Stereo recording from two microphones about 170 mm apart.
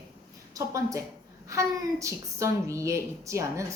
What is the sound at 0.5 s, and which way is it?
A woman's voice, 20° right (ahead or behind).